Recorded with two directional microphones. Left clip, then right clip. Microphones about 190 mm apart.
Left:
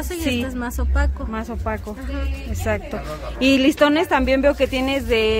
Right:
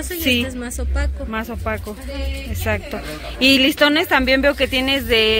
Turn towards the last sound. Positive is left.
turn(degrees=5)  # may be behind; listen again after turning